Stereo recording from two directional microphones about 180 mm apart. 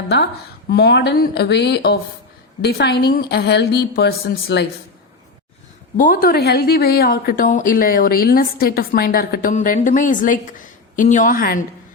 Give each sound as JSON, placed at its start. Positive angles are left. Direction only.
{"t": 0.7, "sound": "a woman's voice", "side_deg": 70}
{"t": 6.0, "sound": "a woman's voice", "side_deg": 50}